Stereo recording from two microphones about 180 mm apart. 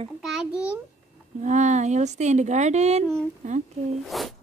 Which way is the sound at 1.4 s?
40° right (ahead or behind).